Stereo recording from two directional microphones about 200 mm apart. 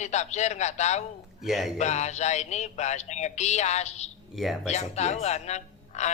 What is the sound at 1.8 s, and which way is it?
A man's voice, 35° left (ahead or behind).